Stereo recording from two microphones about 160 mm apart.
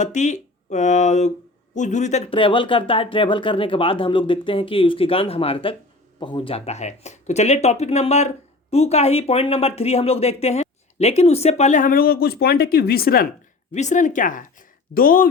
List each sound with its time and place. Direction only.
0.0 s speech: 50° left (ahead or behind); by 13.2 s 70° left (ahead or behind)
13.7 s speech: 50° left (ahead or behind)